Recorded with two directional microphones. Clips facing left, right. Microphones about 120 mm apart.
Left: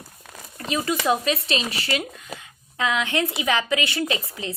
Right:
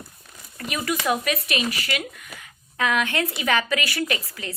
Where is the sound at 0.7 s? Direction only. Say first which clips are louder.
Left 2 dB; 25° left (ahead or behind).